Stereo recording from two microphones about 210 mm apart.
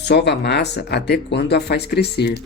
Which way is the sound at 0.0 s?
55° left (ahead or behind).